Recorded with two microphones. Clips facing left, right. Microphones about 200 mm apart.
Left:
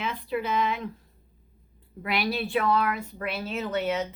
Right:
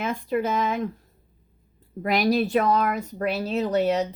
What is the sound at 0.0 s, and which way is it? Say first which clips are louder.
Speech: right 5 dB; 45° right (ahead or behind).